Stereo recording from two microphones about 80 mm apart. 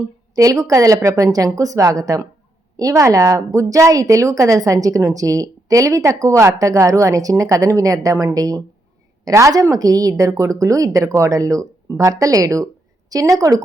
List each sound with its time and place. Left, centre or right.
0.3 s a woman's voice: right